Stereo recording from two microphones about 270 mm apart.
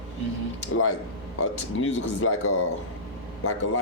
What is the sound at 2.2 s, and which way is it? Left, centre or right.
Speech, left.